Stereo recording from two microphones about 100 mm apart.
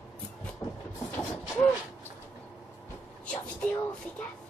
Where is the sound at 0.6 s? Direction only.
40° left (ahead or behind).